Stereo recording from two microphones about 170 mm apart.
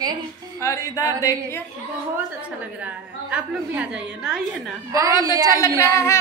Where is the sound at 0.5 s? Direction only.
20° left (ahead or behind).